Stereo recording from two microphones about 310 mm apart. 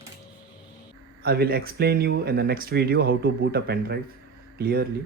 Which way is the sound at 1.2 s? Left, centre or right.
Right.